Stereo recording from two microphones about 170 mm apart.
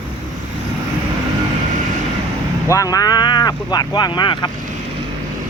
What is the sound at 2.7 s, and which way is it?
Speech, 20° left (ahead or behind).